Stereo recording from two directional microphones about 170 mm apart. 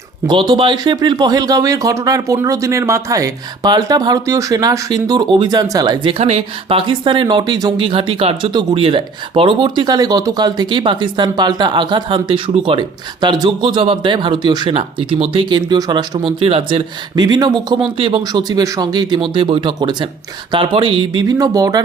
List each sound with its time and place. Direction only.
0.5 s speech: 30° right (ahead or behind)